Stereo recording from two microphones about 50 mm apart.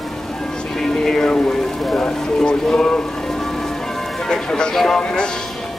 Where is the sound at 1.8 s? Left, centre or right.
Centre.